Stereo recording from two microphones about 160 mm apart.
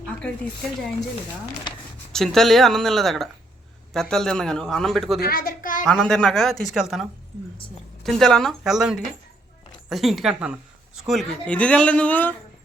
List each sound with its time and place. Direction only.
0.1 s a sound: 5° left (ahead or behind)
2.1 s a woman's voice: centre (ahead or behind)
5.2 s a child's voice: 70° left (ahead or behind)
5.8 s a woman's voice: 5° left (ahead or behind)